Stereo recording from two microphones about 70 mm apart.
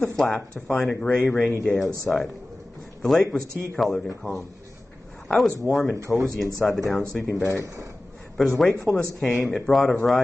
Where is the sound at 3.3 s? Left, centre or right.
Centre.